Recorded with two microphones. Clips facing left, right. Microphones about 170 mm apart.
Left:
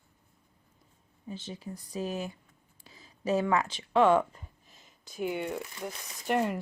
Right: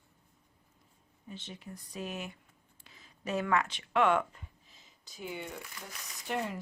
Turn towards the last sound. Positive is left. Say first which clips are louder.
# left 7 dB
turn(degrees=60)  # may be behind; listen again after turning